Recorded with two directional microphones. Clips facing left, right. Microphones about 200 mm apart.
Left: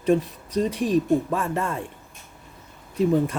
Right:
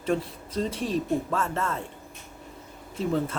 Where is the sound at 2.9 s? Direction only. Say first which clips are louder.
Left 6 dB; 15° left (ahead or behind).